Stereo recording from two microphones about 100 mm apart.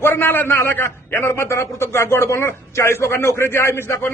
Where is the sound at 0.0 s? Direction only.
20° left (ahead or behind).